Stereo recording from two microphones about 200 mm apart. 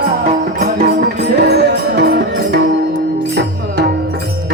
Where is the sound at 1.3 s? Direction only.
55° right (ahead or behind).